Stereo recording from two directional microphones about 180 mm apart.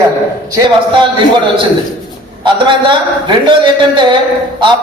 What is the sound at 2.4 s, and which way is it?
Speech, 25° right (ahead or behind).